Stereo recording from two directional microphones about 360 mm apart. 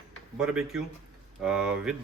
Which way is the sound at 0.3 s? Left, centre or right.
Centre.